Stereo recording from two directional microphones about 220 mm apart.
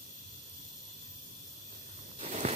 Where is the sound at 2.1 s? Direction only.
30° right (ahead or behind).